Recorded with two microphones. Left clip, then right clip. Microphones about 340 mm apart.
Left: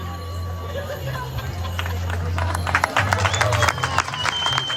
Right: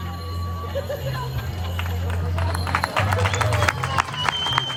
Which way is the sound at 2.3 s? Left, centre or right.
Left.